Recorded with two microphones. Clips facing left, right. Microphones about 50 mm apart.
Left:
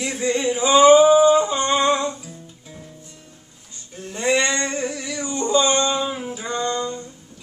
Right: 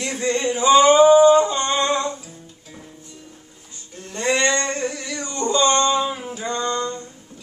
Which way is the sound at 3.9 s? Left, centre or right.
Centre.